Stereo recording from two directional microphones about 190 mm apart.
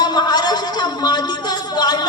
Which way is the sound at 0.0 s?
20° left (ahead or behind).